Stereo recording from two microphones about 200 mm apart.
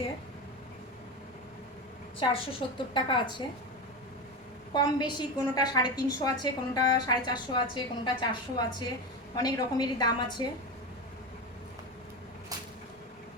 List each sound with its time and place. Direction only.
2.1 s a woman's voice: 25° left (ahead or behind)
4.7 s a woman's voice: 20° left (ahead or behind)